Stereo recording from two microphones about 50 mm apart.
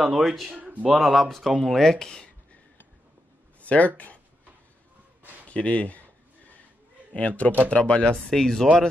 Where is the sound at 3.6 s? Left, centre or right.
Left.